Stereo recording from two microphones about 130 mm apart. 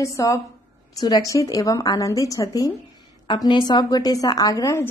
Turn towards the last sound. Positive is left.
turn(degrees=25)  # may be behind; listen again after turning